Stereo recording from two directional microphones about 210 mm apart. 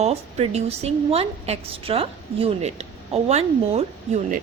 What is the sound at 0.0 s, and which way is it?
A woman's voice, 30° right (ahead or behind).